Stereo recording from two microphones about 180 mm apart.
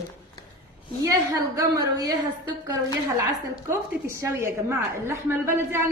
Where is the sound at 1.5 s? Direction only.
20° right (ahead or behind).